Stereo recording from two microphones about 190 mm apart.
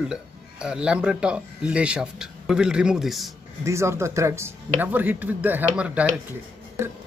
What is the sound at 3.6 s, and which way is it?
Speech, 15° right (ahead or behind).